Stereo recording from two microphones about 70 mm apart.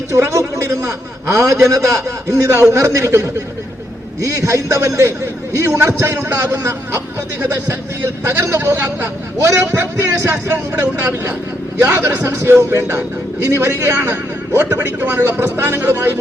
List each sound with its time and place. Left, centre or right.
0.1 s a man's voice: right
8.6 s a man's voice: right
9.4 s a man's voice: right